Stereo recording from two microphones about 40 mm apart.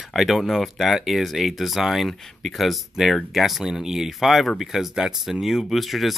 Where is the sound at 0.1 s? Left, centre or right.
Centre.